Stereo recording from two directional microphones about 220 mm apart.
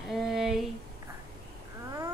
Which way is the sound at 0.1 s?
Centre (ahead or behind).